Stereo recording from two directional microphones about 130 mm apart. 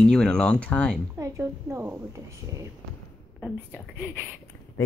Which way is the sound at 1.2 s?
20° right (ahead or behind).